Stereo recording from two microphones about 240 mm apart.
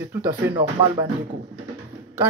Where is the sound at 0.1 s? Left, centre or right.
Centre.